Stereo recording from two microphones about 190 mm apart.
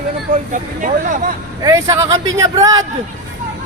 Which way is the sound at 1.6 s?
15° right (ahead or behind).